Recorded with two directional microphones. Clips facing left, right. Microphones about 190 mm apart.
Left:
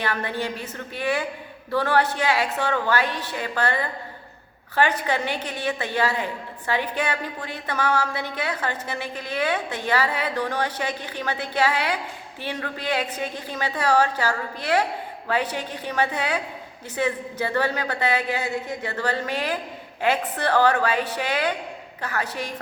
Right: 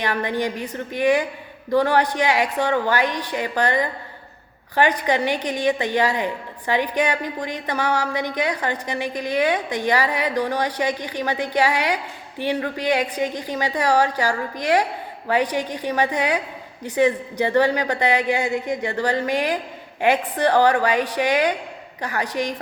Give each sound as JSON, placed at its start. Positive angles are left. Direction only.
{"t": 0.0, "sound": "a woman's voice", "side_deg": -15}